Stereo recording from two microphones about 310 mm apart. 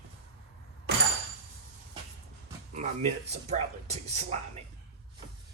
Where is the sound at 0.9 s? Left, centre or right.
Right.